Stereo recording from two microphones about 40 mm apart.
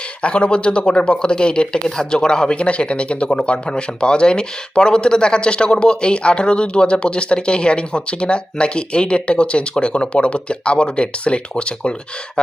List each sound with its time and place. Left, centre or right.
0.2 s speech: left